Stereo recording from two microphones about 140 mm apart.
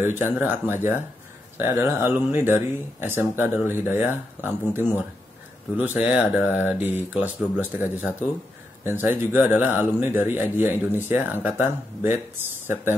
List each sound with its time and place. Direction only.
0.0 s speech: 15° right (ahead or behind)
5.8 s speech: 10° right (ahead or behind)